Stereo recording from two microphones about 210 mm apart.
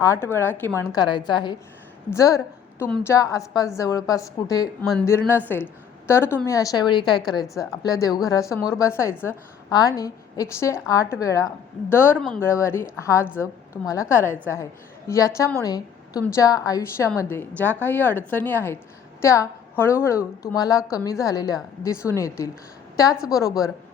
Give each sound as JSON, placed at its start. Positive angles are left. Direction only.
{"t": 0.0, "sound": "a woman's voice", "side_deg": 10}